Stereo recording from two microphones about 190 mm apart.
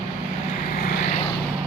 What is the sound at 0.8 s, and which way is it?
Vehicle, 45° left (ahead or behind).